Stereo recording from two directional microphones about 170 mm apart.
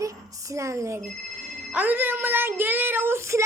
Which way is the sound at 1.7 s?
10° right (ahead or behind).